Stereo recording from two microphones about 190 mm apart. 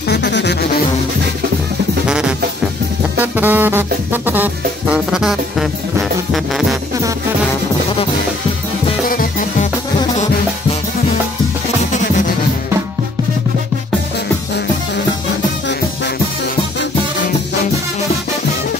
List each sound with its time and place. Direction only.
0.1 s music: 65° left (ahead or behind)
2.0 s music: 5° right (ahead or behind)
9.1 s music: 45° left (ahead or behind)